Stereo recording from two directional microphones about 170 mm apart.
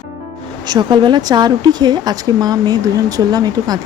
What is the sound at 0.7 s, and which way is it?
Speech, 25° right (ahead or behind).